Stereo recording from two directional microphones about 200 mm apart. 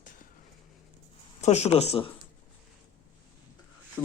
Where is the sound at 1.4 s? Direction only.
35° left (ahead or behind).